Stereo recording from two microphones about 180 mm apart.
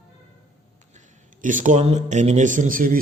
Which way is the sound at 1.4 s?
45° right (ahead or behind).